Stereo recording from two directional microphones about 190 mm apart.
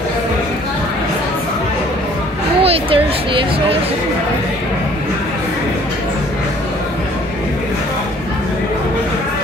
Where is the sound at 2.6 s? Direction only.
30° right (ahead or behind).